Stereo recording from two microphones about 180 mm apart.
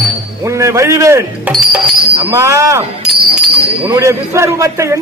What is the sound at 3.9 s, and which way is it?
Speech, 15° right (ahead or behind).